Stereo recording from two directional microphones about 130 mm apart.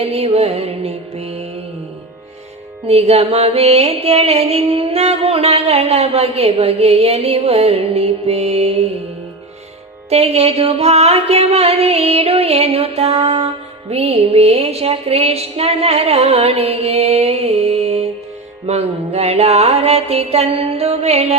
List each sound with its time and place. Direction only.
0.0 s music: 50° right (ahead or behind)
2.8 s music: 55° right (ahead or behind)
10.1 s music: 55° right (ahead or behind)